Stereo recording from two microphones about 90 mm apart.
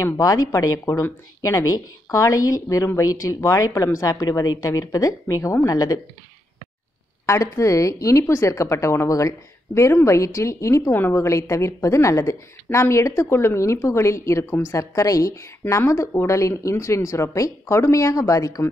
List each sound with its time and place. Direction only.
0.2 s a woman's voice: 40° left (ahead or behind)
7.2 s a woman's voice: 35° left (ahead or behind)
15.6 s speech: 25° left (ahead or behind)
15.9 s a woman's voice: 35° left (ahead or behind)